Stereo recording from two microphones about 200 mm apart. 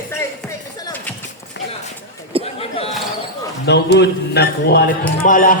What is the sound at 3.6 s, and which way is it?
Speech, 60° left (ahead or behind).